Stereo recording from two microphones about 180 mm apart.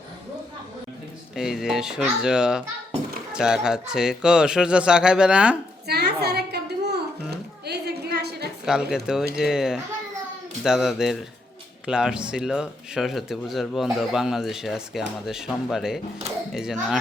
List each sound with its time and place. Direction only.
1.4 s speech: 5° right (ahead or behind)
5.9 s a sound: 65° right (ahead or behind)
8.6 s speech: 5° right (ahead or behind)